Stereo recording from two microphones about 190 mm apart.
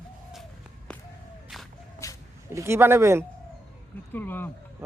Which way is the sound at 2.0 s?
15° left (ahead or behind).